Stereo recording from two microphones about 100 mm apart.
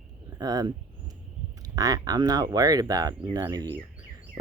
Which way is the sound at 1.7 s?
35° right (ahead or behind).